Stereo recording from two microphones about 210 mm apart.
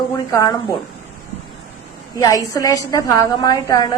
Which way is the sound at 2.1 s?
15° left (ahead or behind).